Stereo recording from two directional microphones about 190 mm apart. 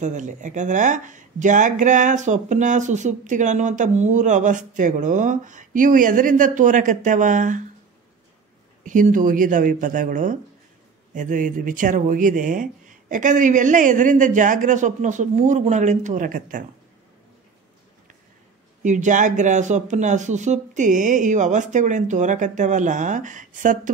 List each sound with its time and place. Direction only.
0.0 s speech: 40° right (ahead or behind)
8.8 s speech: 45° right (ahead or behind)
18.8 s speech: 40° right (ahead or behind)